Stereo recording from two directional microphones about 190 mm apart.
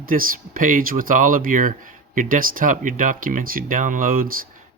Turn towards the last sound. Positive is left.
turn(degrees=-50)  # may be behind; listen again after turning